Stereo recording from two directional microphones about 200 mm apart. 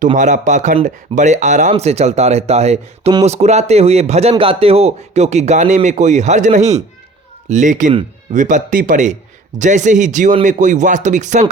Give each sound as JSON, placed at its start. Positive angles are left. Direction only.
{"t": 0.2, "sound": "a man's voice", "side_deg": -40}